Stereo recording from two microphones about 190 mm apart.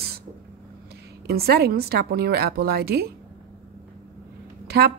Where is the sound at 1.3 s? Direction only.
55° right (ahead or behind).